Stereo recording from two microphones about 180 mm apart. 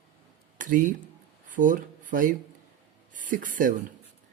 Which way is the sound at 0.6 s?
45° right (ahead or behind).